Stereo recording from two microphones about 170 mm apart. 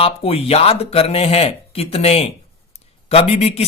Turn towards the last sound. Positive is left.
turn(degrees=35)  # may be behind; listen again after turning